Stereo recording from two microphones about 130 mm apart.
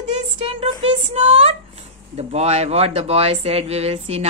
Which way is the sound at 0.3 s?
45° right (ahead or behind).